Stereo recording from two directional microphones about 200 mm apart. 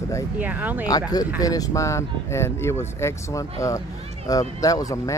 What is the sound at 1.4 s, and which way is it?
Speech, 15° left (ahead or behind).